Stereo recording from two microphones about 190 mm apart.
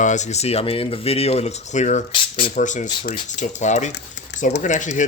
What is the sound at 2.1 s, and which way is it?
Speech, 25° left (ahead or behind).